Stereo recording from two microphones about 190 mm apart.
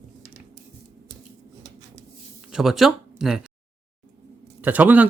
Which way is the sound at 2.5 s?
Centre (ahead or behind).